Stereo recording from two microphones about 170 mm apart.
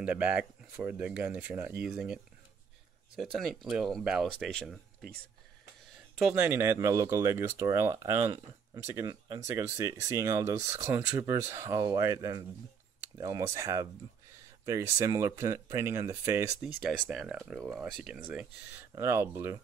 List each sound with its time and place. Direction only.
0.0 s speech: 5° right (ahead or behind)
3.2 s speech: centre (ahead or behind)
6.2 s speech: 10° right (ahead or behind)
17.1 s speech: centre (ahead or behind)